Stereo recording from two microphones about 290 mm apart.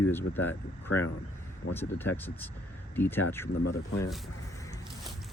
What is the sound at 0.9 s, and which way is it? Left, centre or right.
Speech, left.